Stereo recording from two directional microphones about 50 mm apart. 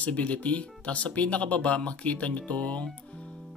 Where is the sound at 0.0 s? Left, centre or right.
Left.